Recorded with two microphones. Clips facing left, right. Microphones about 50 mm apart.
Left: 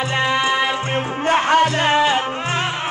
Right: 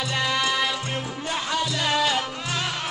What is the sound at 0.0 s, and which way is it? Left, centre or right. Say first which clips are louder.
Music: left 6 dB; left.